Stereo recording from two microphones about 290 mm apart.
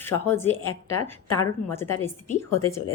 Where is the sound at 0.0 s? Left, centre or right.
Centre.